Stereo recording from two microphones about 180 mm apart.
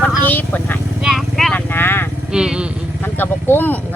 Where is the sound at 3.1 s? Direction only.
10° left (ahead or behind).